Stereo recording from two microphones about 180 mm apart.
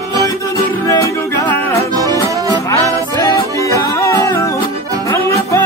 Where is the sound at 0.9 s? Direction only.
15° left (ahead or behind).